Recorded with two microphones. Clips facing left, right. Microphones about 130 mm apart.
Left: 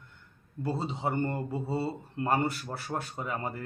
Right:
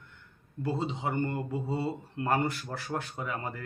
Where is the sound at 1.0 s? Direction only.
30° left (ahead or behind).